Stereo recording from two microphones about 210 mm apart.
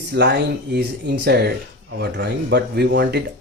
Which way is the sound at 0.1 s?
55° right (ahead or behind).